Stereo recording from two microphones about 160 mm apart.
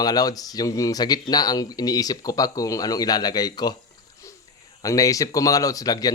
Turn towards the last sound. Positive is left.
turn(degrees=25)  # may be behind; listen again after turning